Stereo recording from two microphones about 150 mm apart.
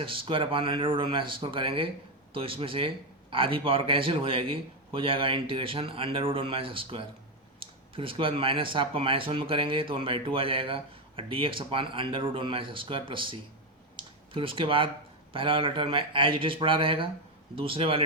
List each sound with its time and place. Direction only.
0.0 s speech: 35° right (ahead or behind)
13.9 s a sound: 35° right (ahead or behind)
15.3 s speech: 35° right (ahead or behind)